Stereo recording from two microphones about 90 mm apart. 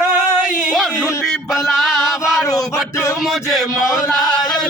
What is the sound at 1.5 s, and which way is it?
Music, centre (ahead or behind).